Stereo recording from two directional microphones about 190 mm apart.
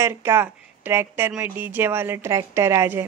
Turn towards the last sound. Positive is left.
turn(degrees=-15)  # may be behind; listen again after turning